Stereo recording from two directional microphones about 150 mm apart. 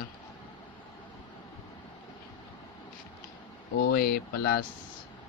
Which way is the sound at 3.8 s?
90° left.